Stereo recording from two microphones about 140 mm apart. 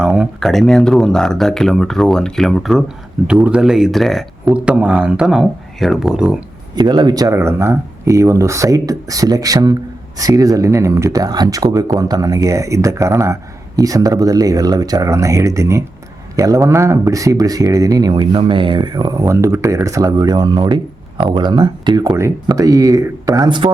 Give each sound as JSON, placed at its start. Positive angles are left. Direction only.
{"t": 0.0, "sound": "speech", "side_deg": -5}
{"t": 4.5, "sound": "speech", "side_deg": -10}
{"t": 6.7, "sound": "speech", "side_deg": -30}